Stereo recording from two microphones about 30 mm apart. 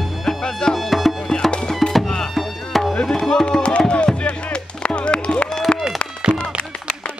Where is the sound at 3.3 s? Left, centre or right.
Left.